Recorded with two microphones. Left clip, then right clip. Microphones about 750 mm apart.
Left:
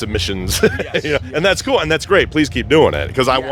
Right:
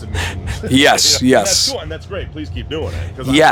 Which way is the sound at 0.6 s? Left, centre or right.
Left.